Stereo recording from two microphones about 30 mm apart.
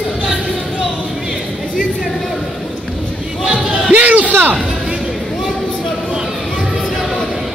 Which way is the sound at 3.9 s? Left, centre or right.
Right.